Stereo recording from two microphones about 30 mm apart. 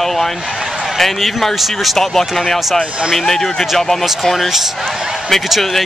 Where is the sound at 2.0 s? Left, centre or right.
Centre.